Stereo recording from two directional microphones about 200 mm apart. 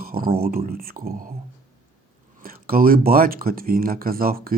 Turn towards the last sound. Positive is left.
turn(degrees=-45)  # may be behind; listen again after turning